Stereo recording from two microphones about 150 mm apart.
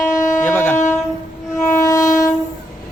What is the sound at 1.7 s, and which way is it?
Train, 20° left (ahead or behind).